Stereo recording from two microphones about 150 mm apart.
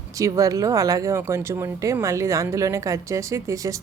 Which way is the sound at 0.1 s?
20° right (ahead or behind).